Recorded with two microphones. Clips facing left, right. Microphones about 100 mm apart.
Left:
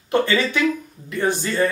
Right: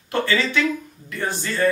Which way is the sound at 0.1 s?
20° left (ahead or behind).